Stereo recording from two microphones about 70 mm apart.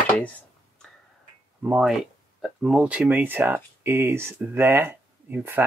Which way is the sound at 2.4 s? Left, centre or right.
Centre.